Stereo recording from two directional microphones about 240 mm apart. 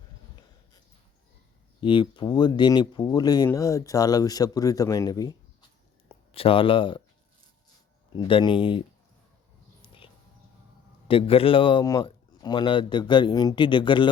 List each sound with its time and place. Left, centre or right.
1.8 s speech: left
8.1 s a man's voice: centre
9.8 s a sound: left
11.1 s a man's voice: left